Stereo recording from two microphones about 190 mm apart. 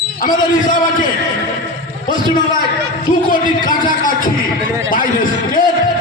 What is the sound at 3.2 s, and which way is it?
Speech, 45° left (ahead or behind).